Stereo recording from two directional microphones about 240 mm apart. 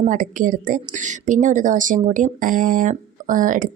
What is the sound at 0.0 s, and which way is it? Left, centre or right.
A woman's voice, right.